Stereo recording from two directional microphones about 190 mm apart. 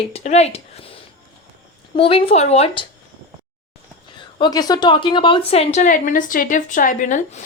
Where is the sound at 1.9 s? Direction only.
30° left (ahead or behind).